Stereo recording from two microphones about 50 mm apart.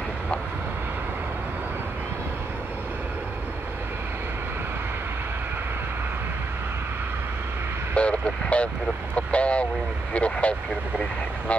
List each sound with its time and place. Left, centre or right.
7.9 s vehicle: left
10.1 s speech: left